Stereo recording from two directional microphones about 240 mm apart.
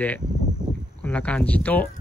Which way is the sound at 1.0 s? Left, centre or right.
Centre.